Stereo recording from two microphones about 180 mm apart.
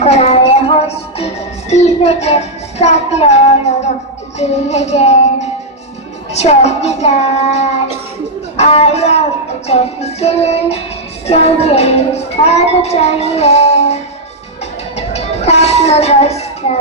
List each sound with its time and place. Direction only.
0.0 s music: 35° left (ahead or behind)
1.7 s a child's voice: 35° left (ahead or behind)
6.3 s a child's voice: 35° left (ahead or behind)
14.9 s train: 35° left (ahead or behind)